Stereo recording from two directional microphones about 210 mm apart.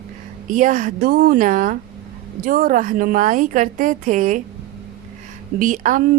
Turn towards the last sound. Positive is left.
turn(degrees=-35)  # may be behind; listen again after turning